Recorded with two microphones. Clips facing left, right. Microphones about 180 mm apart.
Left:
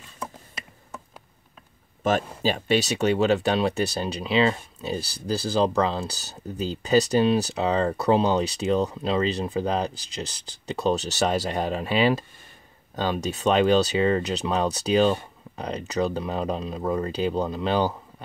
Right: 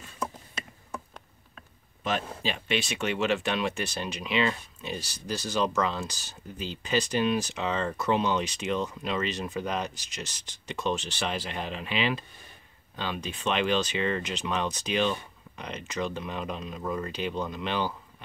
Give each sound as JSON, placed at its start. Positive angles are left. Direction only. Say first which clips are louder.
{"t": 2.0, "sound": "speech", "louder": "left 7 dB", "side_deg": 45}